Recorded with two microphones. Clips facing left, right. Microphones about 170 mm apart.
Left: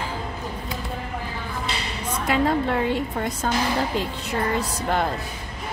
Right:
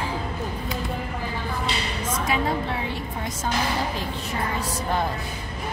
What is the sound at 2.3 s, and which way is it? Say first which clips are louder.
A woman's voice: left 6 dB; 60° left (ahead or behind).